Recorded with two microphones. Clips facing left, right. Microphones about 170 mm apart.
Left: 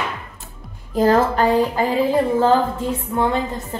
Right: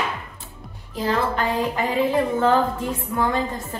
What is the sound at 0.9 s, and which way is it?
Speech, 45° left (ahead or behind).